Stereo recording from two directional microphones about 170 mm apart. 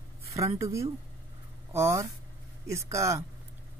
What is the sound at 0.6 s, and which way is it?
Speech, 15° right (ahead or behind).